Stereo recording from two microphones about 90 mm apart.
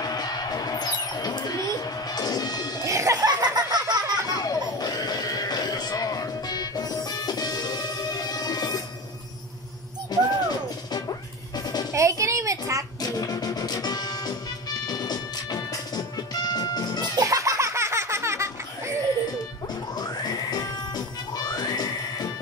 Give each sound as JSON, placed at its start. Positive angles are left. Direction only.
{"t": 0.0, "sound": "music", "side_deg": 45}
{"t": 2.8, "sound": "laughter", "side_deg": -35}
{"t": 4.3, "sound": "a sound", "side_deg": 45}
{"t": 10.1, "sound": "music", "side_deg": 50}
{"t": 11.9, "sound": "a sound", "side_deg": -35}
{"t": 13.0, "sound": "music", "side_deg": 40}
{"t": 17.2, "sound": "laughter", "side_deg": -40}
{"t": 19.7, "sound": "music", "side_deg": 45}